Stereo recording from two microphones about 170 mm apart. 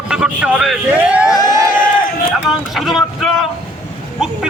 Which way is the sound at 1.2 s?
25° left (ahead or behind).